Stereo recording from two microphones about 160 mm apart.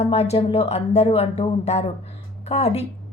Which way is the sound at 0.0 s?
40° left (ahead or behind).